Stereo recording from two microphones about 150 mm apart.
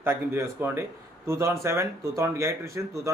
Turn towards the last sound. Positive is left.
turn(degrees=-20)  # may be behind; listen again after turning